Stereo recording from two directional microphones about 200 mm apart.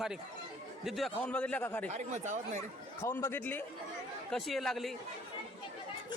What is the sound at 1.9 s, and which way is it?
Speech, 35° right (ahead or behind).